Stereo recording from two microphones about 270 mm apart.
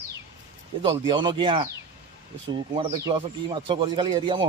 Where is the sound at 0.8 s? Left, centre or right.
Centre.